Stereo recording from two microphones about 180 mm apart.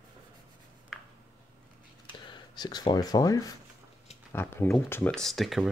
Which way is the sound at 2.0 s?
25° left (ahead or behind).